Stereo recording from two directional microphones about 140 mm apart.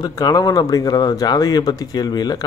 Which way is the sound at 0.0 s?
30° left (ahead or behind).